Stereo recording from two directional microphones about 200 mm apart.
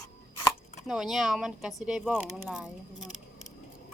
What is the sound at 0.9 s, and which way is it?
Speech, centre (ahead or behind).